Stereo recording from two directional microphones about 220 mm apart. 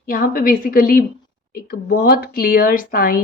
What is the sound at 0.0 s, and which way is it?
A woman's voice, 40° left (ahead or behind).